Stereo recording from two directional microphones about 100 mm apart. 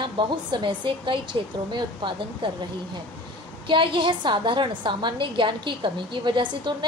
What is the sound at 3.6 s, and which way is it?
Speech, 55° right (ahead or behind).